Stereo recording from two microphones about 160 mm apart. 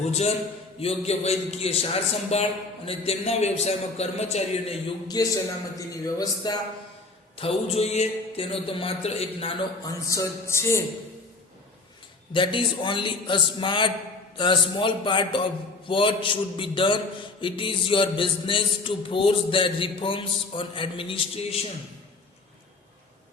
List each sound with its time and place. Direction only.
0.0 s a man's voice: 40° left (ahead or behind)
5.0 s speech: 25° left (ahead or behind)
7.3 s a man's voice: 35° left (ahead or behind)
9.8 s speech: 20° left (ahead or behind)
12.3 s a man's voice: 30° left (ahead or behind)